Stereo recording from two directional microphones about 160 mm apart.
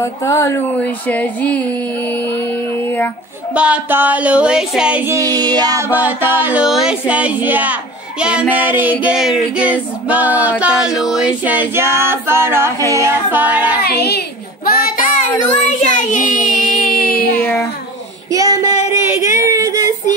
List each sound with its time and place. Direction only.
0.0 s a sound: 20° left (ahead or behind)
3.5 s music: 10° right (ahead or behind)
5.1 s child singing: 25° right (ahead or behind)
5.9 s music: 10° right (ahead or behind)
13.8 s child singing: 85° left; by 15.0 s 65° left (ahead or behind)
15.4 s child singing: 50° left (ahead or behind); by 17.4 s 65° left (ahead or behind)
17.4 s a sound: 10° left (ahead or behind)
18.3 s female singing: 20° right (ahead or behind)
19.0 s child singing: 15° right (ahead or behind)